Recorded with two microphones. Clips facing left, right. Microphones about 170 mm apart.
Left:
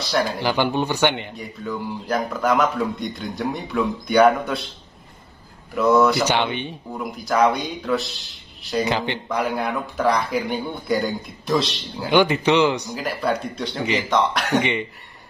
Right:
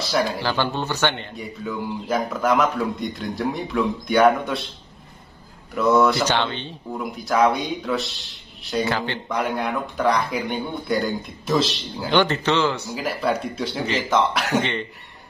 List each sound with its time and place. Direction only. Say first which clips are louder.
0.4 s speech: left 3 dB; 15° left (ahead or behind)
1.3 s a man's voice: even; centre (ahead or behind)
5.8 s a man's voice: left 1 dB; centre (ahead or behind)
6.2 s speech: left 1 dB; 15° left (ahead or behind)
6.9 s a man's voice: right 1 dB; centre (ahead or behind)
8.8 s speech: left 1 dB; 20° left (ahead or behind)
9.3 s a man's voice: even; centre (ahead or behind)
12.1 s speech: left 3 dB; 10° left (ahead or behind)
12.9 s a man's voice: even; centre (ahead or behind)
14.6 s speech: left 2 dB; 15° left (ahead or behind)